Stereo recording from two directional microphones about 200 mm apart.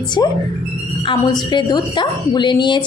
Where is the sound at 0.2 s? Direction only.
20° left (ahead or behind).